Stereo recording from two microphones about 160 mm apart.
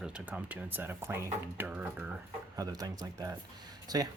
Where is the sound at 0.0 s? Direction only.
10° right (ahead or behind).